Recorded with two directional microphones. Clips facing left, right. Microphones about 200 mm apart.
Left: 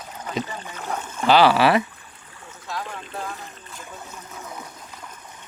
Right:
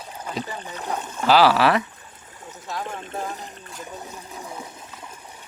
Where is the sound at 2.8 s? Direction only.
45° right (ahead or behind).